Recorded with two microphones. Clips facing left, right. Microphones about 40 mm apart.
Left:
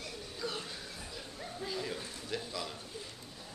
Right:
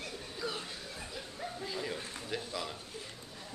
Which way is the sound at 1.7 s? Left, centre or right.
Centre.